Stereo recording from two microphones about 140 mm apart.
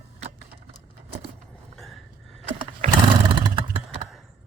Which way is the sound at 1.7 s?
Centre (ahead or behind).